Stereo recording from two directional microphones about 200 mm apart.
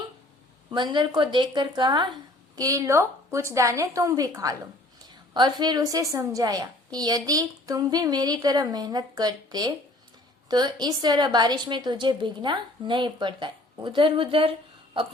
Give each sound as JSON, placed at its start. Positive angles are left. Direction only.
{"t": 0.7, "sound": "a woman's voice", "side_deg": -20}